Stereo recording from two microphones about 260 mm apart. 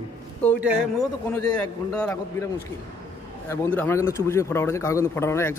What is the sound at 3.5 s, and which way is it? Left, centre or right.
A man's voice, centre.